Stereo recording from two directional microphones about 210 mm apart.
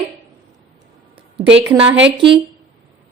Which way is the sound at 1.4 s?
25° right (ahead or behind).